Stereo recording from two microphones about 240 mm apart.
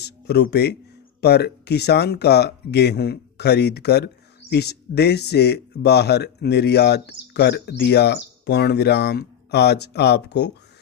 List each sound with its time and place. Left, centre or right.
0.0 s speech: left